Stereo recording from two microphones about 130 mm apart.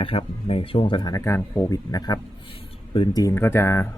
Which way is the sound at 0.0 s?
45° left (ahead or behind).